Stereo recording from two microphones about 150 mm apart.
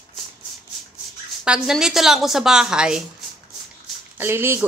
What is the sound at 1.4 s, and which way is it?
Speech, 5° right (ahead or behind).